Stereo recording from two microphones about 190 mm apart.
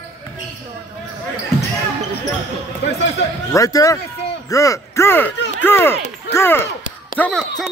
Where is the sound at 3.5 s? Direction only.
15° left (ahead or behind).